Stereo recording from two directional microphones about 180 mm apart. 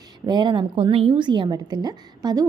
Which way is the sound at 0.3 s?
25° right (ahead or behind).